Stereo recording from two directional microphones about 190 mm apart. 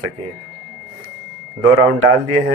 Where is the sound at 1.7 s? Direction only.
90° right.